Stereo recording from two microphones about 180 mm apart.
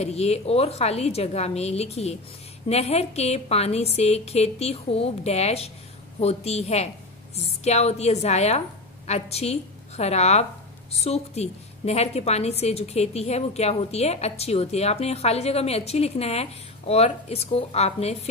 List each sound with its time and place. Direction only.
0.0 s a woman's voice: 35° left (ahead or behind)